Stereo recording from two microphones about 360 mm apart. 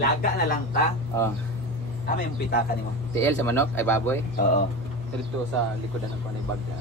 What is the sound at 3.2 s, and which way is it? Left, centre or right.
Speech, centre.